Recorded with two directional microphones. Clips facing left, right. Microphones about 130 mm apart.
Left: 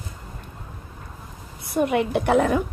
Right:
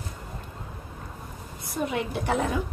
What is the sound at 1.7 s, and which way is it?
Speech, 70° left (ahead or behind).